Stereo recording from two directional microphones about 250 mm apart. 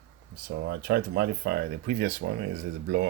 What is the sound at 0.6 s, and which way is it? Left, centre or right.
Speech, right.